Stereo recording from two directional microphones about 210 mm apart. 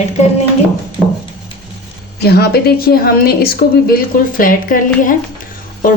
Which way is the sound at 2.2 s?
50° left (ahead or behind).